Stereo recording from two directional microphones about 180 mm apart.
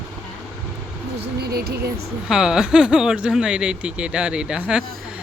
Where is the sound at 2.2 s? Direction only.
5° right (ahead or behind).